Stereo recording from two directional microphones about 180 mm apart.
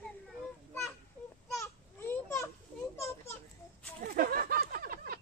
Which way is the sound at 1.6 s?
15° left (ahead or behind).